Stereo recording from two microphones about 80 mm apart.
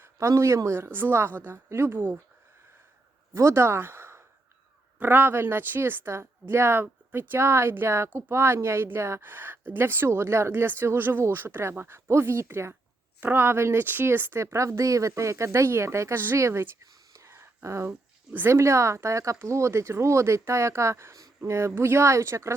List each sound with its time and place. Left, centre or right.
0.0 s speech: right
3.3 s speech: right
16.8 s whispering: right
18.3 s speech: right